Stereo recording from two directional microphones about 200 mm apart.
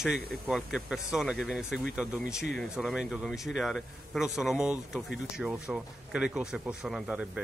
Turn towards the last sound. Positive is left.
turn(degrees=-5)  # may be behind; listen again after turning